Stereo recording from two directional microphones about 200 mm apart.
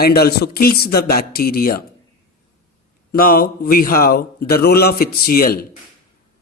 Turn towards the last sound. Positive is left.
turn(degrees=50)  # may be behind; listen again after turning